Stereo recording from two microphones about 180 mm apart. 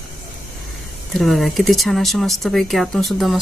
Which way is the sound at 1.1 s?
Centre (ahead or behind).